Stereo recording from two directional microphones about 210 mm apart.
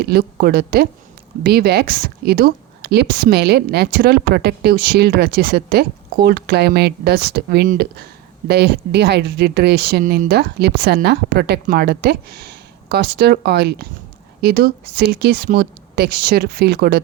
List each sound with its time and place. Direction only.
0.0 s speech: 50° right (ahead or behind)